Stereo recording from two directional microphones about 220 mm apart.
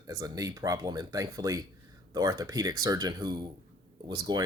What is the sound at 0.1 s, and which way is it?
Speech, 15° right (ahead or behind).